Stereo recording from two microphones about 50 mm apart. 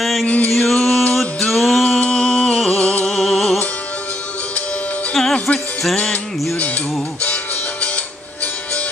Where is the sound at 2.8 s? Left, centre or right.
Left.